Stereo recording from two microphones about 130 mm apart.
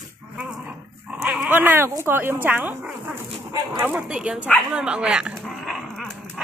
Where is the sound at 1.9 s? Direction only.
20° right (ahead or behind).